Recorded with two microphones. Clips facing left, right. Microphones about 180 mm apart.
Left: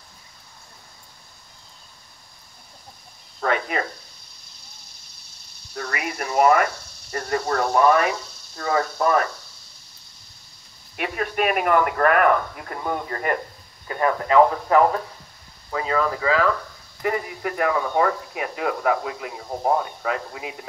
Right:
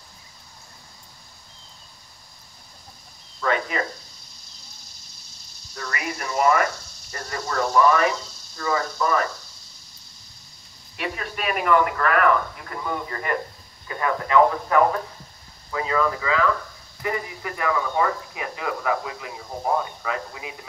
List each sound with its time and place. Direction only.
3.3 s cricket: 55° left (ahead or behind)
5.8 s radio: 55° left (ahead or behind)
7.1 s a sound: 55° left (ahead or behind)
11.0 s a man's voice: 50° left (ahead or behind)
13.8 s speech: 35° left (ahead or behind)
17.0 s speech: 50° left (ahead or behind)